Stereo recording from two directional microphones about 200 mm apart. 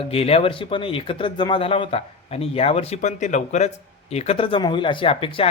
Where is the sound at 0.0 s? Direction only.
30° left (ahead or behind).